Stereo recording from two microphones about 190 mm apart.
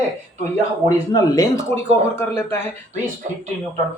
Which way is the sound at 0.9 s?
20° left (ahead or behind).